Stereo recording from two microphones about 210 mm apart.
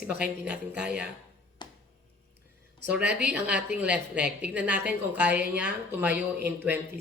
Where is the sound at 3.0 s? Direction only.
50° right (ahead or behind).